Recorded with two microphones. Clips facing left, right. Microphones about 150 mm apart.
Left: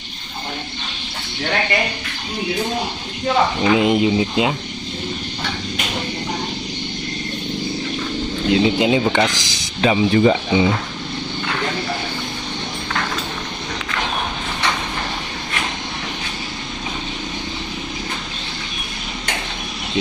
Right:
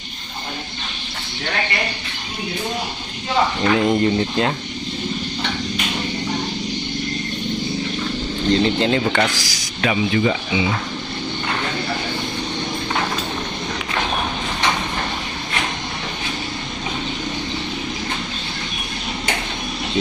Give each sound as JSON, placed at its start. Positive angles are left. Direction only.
{"t": 3.6, "sound": "speech", "side_deg": 10}
{"t": 8.5, "sound": "speech", "side_deg": 10}
{"t": 10.2, "sound": "speech", "side_deg": 40}